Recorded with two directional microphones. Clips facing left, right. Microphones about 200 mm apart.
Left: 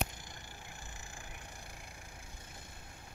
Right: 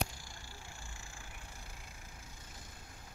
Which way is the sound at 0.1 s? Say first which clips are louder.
Left 1 dB; 20° left (ahead or behind).